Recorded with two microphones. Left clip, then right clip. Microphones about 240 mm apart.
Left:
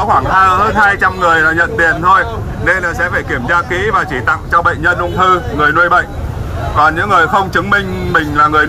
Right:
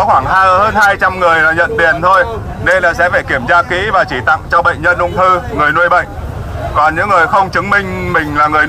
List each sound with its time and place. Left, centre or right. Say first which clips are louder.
0.6 s speech: right 1 dB; right